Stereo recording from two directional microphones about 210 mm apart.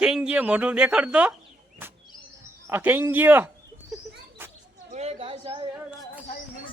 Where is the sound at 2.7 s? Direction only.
10° right (ahead or behind).